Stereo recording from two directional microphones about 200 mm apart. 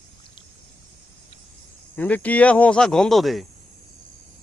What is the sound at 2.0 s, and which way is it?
Speech, 5° left (ahead or behind).